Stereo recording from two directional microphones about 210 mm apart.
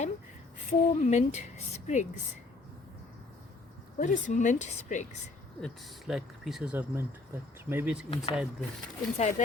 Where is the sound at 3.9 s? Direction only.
35° left (ahead or behind).